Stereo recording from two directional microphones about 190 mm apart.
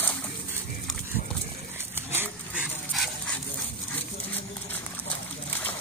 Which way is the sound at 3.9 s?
10° left (ahead or behind).